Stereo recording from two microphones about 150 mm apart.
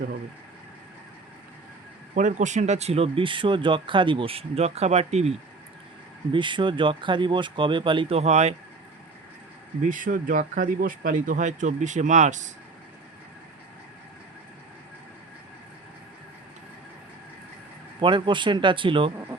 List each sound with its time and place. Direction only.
2.1 s speech: 55° right (ahead or behind)
6.3 s speech: 35° right (ahead or behind)
9.8 s speech: 60° right (ahead or behind)
18.0 s speech: 30° right (ahead or behind)